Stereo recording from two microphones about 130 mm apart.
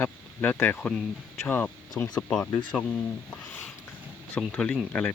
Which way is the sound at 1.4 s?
15° left (ahead or behind).